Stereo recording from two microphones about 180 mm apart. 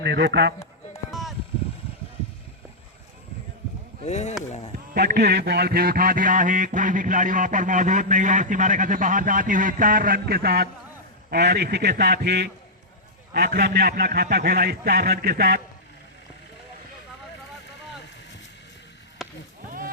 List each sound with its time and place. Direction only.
0.0 s a man's voice: 70° right (ahead or behind)
4.0 s speech: 40° left (ahead or behind)
4.9 s music: 70° right (ahead or behind)
11.3 s a man's voice: 65° right (ahead or behind)
19.2 s a sound: centre (ahead or behind)